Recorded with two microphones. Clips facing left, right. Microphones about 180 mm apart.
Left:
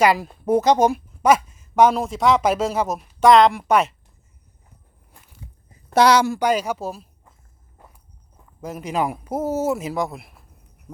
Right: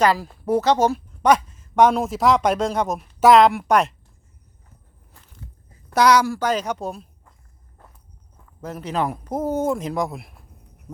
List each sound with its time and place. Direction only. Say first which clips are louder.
0.0 s a woman's voice: left 1 dB; 15° left (ahead or behind)
5.9 s speech: left 1 dB; 25° left (ahead or behind); by 7.3 s centre (ahead or behind)
7.8 s walk: left 1 dB; 15° left (ahead or behind)
8.6 s a woman's voice: left 1 dB; 10° left (ahead or behind)